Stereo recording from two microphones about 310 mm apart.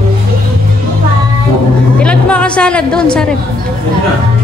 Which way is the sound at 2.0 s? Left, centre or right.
Centre.